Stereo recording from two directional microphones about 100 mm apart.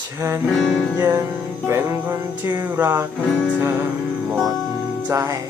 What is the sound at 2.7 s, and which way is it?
Music, 20° right (ahead or behind).